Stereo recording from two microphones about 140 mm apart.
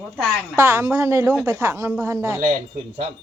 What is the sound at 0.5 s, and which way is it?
A woman's voice, 15° right (ahead or behind).